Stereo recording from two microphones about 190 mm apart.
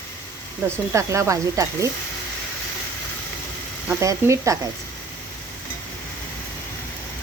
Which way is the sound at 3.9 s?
15° right (ahead or behind).